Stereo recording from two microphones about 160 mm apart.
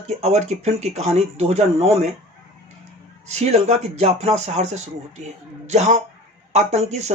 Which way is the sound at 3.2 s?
45° right (ahead or behind).